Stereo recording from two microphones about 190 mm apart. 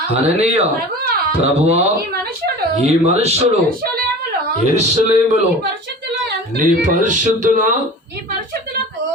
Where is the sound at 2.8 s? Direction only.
35° right (ahead or behind).